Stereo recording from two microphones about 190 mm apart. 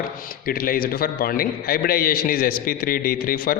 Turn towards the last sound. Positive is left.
turn(degrees=50)  # may be behind; listen again after turning